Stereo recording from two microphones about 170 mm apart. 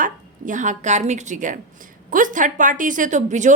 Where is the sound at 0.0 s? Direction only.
50° right (ahead or behind).